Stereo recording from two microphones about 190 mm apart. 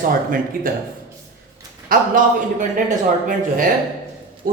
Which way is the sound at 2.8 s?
45° right (ahead or behind).